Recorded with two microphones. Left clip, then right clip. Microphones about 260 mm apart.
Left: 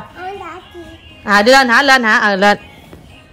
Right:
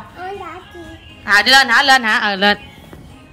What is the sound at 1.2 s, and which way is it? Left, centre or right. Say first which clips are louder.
Speech: left 2 dB; left.